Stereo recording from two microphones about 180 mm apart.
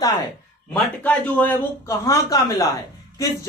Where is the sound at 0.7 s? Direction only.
10° left (ahead or behind).